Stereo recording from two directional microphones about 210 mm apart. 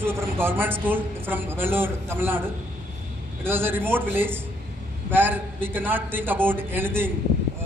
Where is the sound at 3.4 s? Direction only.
10° right (ahead or behind).